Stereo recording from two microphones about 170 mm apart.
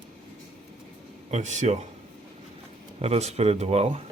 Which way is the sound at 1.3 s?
45° right (ahead or behind).